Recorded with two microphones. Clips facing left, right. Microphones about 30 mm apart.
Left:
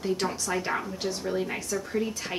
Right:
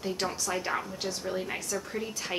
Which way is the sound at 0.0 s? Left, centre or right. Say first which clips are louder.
Left 3 dB; centre.